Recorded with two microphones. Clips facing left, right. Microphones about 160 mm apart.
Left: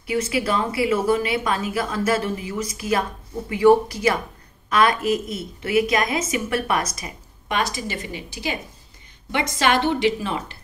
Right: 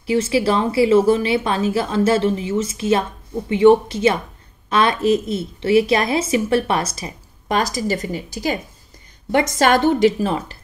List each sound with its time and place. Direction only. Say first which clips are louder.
0.0 s a woman's voice: right 5 dB; 30° right (ahead or behind)